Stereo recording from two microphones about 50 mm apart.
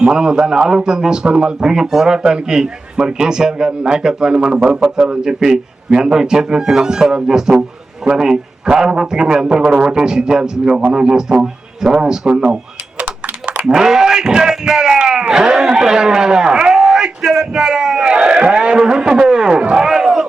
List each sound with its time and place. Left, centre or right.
0.0 s a man's voice: centre
13.7 s a man's voice: centre
14.9 s a sound: centre